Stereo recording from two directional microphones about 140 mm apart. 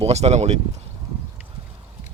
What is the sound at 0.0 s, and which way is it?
Speech, 50° right (ahead or behind).